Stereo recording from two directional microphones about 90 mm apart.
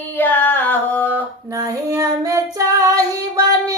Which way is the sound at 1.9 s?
40° right (ahead or behind).